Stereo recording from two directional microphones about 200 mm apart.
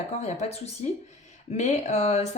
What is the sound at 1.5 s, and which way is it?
Speech, 35° left (ahead or behind).